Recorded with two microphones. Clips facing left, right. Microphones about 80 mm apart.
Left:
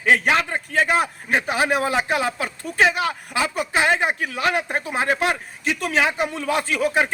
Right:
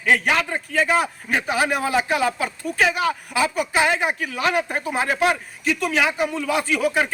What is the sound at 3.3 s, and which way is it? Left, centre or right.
Speech, left.